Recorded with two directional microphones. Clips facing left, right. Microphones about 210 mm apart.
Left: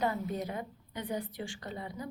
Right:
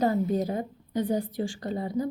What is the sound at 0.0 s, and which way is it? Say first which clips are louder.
A woman's voice: right 8 dB; 40° right (ahead or behind).